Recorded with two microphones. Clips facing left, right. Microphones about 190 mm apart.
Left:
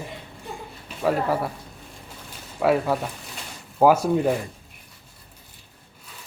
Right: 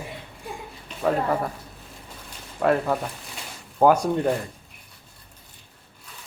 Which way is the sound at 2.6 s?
5° left (ahead or behind).